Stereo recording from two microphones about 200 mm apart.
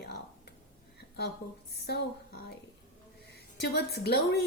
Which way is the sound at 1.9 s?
55° left (ahead or behind).